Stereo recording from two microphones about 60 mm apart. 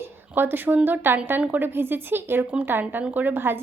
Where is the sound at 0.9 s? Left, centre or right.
Right.